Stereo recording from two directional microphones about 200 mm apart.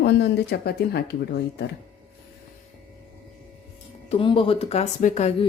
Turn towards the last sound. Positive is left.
turn(degrees=35)  # may be behind; listen again after turning